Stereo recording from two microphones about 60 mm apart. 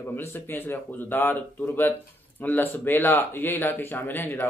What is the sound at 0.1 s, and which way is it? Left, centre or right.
A man's voice, left.